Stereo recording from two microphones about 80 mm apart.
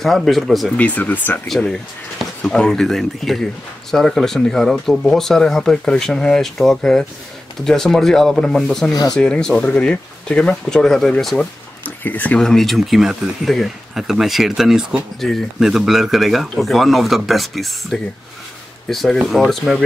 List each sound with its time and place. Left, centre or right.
0.0 s speech: centre
0.7 s speech: centre
2.4 s speech: centre
11.8 s speech: left
12.4 s speech: centre